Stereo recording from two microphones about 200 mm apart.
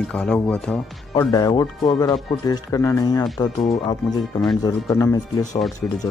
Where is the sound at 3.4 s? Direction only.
30° left (ahead or behind).